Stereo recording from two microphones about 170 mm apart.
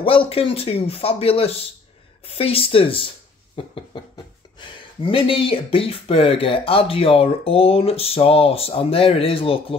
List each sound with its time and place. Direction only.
0.0 s speech: 35° left (ahead or behind)